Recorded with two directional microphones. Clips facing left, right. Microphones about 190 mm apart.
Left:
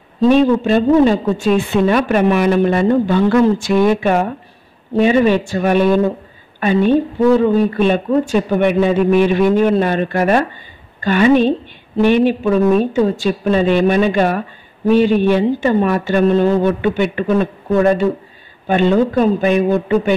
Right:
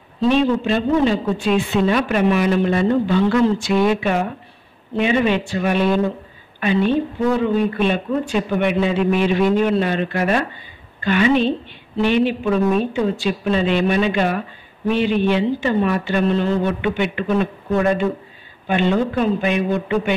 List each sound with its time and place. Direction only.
0.2 s a woman's voice: 45° left (ahead or behind)